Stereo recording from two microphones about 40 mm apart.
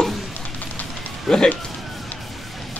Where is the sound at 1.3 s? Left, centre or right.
Centre.